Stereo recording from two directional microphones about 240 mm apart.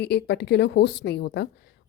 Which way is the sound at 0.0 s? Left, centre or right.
Left.